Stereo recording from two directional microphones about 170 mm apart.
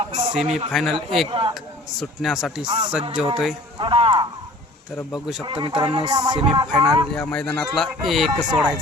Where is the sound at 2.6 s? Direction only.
30° right (ahead or behind).